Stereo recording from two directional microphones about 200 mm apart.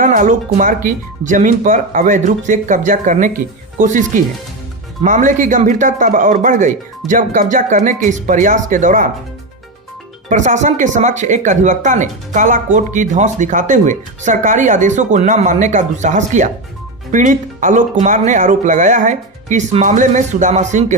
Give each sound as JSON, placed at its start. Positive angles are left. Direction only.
{"t": 0.0, "sound": "speech", "side_deg": -40}
{"t": 10.2, "sound": "speech", "side_deg": -35}